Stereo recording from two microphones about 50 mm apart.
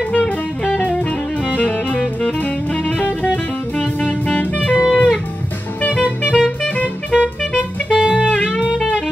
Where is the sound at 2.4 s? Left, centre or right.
Left.